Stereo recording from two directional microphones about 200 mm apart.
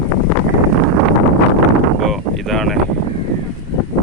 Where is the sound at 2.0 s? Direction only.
Centre (ahead or behind).